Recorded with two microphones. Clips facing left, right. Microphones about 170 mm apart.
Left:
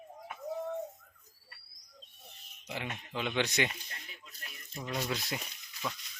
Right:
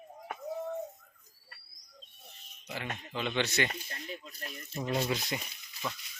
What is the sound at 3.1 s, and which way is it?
Speech, 10° left (ahead or behind).